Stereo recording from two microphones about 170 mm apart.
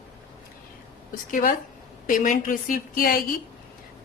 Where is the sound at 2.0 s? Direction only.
50° left (ahead or behind).